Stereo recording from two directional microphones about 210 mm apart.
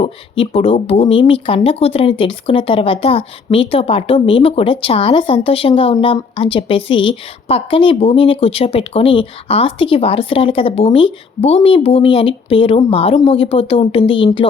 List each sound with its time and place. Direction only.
0.0 s speech: 25° left (ahead or behind)